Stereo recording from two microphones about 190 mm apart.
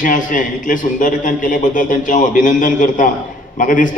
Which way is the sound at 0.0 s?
45° left (ahead or behind).